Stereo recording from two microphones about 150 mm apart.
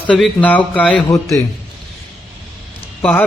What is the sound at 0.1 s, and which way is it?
Speech, 10° left (ahead or behind).